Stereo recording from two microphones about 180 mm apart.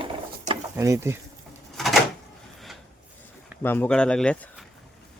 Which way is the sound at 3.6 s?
10° left (ahead or behind).